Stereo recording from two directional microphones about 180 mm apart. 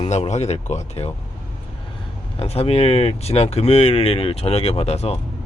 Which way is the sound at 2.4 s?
35° left (ahead or behind).